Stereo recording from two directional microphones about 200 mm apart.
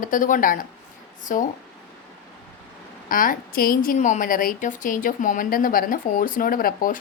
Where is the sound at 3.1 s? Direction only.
45° left (ahead or behind).